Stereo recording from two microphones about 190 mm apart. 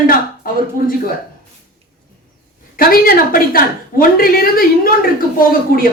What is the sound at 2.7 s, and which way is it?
A woman's voice, 50° left (ahead or behind).